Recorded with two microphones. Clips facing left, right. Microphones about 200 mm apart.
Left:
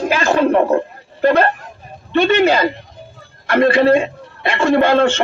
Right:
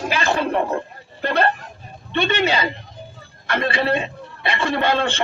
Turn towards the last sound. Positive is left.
turn(degrees=45)  # may be behind; listen again after turning